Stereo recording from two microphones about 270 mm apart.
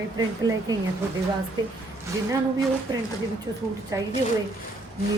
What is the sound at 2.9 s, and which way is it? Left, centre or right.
Speech, centre.